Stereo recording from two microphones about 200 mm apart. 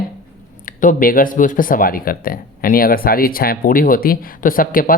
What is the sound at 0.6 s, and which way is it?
Speech, 40° left (ahead or behind).